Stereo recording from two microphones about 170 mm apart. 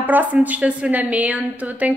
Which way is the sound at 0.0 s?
10° right (ahead or behind).